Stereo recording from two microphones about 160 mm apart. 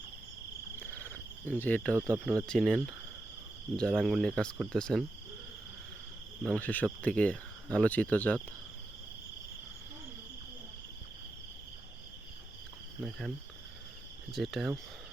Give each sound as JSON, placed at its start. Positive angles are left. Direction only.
{"t": 0.8, "sound": "cricket", "side_deg": 10}
{"t": 2.0, "sound": "cricket", "side_deg": -15}
{"t": 2.5, "sound": "speech", "side_deg": 5}
{"t": 6.4, "sound": "speech", "side_deg": 5}
{"t": 13.0, "sound": "speech", "side_deg": 0}
{"t": 14.3, "sound": "speech", "side_deg": 0}